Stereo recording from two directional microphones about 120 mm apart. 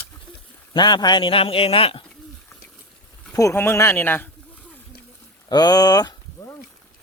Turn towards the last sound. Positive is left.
turn(degrees=25)  # may be behind; listen again after turning